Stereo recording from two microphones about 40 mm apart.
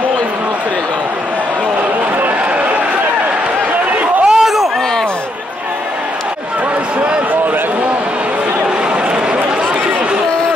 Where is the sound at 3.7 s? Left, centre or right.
Right.